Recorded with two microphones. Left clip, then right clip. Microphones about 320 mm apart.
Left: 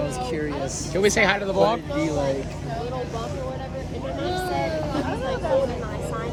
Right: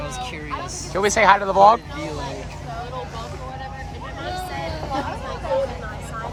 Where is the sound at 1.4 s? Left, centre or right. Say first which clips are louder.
Right 5 dB; right.